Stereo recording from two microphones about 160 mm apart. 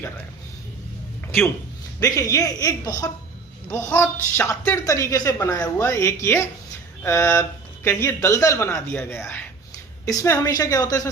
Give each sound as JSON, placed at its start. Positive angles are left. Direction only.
{"t": 2.0, "sound": "speech", "side_deg": 20}